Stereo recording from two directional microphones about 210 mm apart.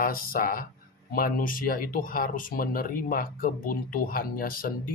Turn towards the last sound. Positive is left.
turn(degrees=45)  # may be behind; listen again after turning